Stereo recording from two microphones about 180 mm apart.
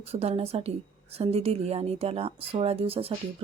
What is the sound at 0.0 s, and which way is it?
Speech, 35° right (ahead or behind).